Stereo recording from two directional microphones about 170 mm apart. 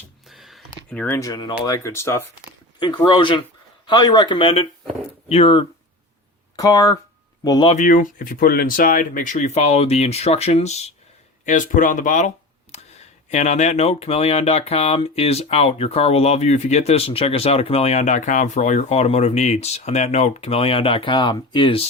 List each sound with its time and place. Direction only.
0.3 s a sound: centre (ahead or behind)
0.9 s speech: 10° left (ahead or behind)
2.7 s speech: 30° left (ahead or behind)
6.6 s speech: 20° left (ahead or behind)
7.7 s speech: 50° left (ahead or behind)
13.3 s speech: 45° left (ahead or behind)